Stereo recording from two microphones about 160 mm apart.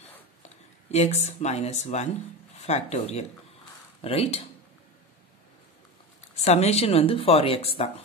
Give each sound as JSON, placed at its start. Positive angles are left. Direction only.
{"t": 0.9, "sound": "speech", "side_deg": 45}
{"t": 6.3, "sound": "speech", "side_deg": 45}